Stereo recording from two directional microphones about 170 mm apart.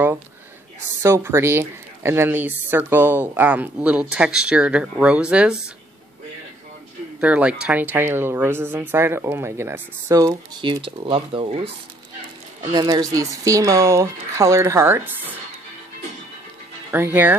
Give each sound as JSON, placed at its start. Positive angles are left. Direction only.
{"t": 1.0, "sound": "speech", "side_deg": -15}
{"t": 7.2, "sound": "speech", "side_deg": -5}
{"t": 10.9, "sound": "speech", "side_deg": -35}
{"t": 12.7, "sound": "speech", "side_deg": -20}
{"t": 16.9, "sound": "speech", "side_deg": -10}